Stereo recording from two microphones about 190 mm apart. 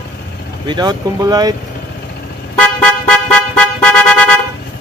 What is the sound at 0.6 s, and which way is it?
Speech, 20° right (ahead or behind).